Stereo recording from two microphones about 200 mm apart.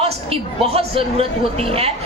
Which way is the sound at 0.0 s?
30° right (ahead or behind).